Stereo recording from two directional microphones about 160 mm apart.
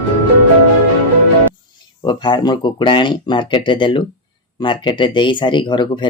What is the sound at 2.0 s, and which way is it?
Speech, 30° left (ahead or behind).